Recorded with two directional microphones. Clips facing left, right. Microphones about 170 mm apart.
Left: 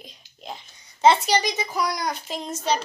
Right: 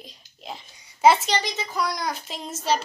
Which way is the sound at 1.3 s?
15° left (ahead or behind).